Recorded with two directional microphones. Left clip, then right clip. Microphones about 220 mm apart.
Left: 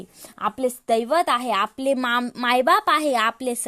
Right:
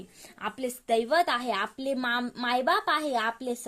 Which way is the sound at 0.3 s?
35° left (ahead or behind).